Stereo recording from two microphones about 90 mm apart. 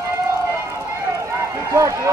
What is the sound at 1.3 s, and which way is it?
Run, 35° right (ahead or behind).